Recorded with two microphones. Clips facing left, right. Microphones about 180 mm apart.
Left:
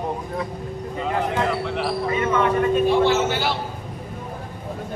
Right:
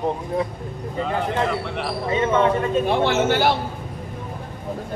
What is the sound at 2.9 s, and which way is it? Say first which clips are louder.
Speech: left 1 dB; 55° right (ahead or behind).